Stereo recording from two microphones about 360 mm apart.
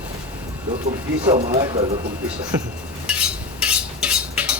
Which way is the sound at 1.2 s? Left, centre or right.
Centre.